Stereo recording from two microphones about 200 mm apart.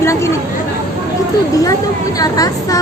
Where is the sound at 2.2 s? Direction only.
20° left (ahead or behind).